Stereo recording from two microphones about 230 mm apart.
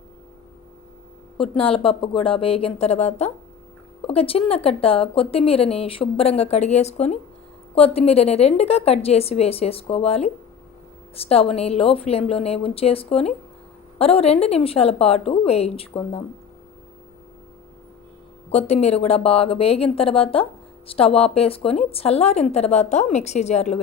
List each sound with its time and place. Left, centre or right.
1.4 s a woman's voice: left
18.5 s a woman's voice: left